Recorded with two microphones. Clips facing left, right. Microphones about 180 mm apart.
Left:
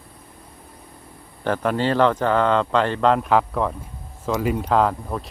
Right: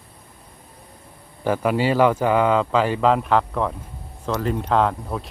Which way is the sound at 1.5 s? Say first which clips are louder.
Right 1 dB; 10° right (ahead or behind).